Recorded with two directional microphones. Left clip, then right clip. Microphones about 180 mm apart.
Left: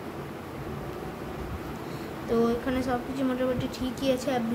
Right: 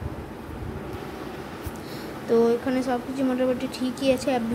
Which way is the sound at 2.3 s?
35° right (ahead or behind).